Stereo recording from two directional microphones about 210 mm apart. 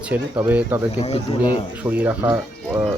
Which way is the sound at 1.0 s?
30° left (ahead or behind).